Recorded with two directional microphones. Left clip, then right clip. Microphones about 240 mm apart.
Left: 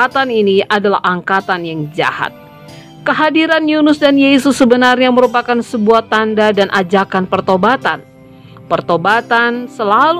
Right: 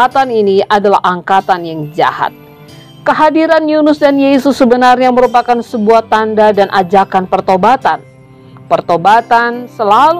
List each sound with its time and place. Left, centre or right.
0.0 s a woman's voice: centre